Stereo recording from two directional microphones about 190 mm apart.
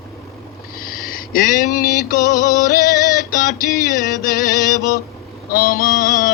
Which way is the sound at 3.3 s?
50° left (ahead or behind).